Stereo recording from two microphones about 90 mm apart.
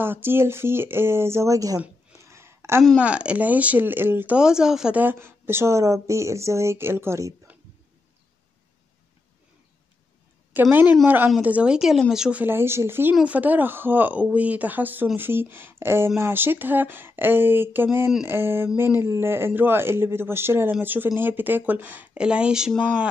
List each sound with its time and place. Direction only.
0.0 s speech: 25° right (ahead or behind)
2.2 s a sound: 30° right (ahead or behind)
3.0 s speech: 15° right (ahead or behind)
4.4 s speech: 10° right (ahead or behind)
4.9 s speech: 25° right (ahead or behind)
10.5 s speech: 20° right (ahead or behind)
12.4 s speech: 25° right (ahead or behind)
18.9 s speech: 40° left (ahead or behind)
19.1 s speech: 25° right (ahead or behind); by 22.8 s 5° right (ahead or behind)